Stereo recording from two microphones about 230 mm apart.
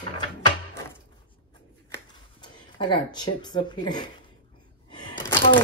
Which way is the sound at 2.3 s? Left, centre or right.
Centre.